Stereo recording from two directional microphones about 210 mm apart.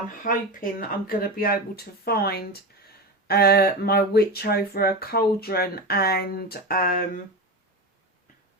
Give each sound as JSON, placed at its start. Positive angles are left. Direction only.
{"t": 0.3, "sound": "speech", "side_deg": 40}